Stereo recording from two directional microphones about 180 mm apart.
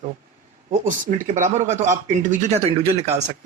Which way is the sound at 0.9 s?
45° right (ahead or behind).